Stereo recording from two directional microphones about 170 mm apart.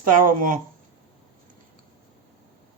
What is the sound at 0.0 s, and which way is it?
Speech, 55° right (ahead or behind).